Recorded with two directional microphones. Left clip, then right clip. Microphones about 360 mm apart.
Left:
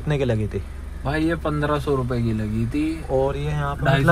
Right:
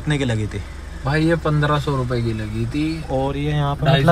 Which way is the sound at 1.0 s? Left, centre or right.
Left.